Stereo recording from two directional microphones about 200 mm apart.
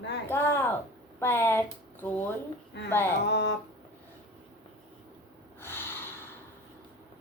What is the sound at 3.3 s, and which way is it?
Speech, 60° left (ahead or behind).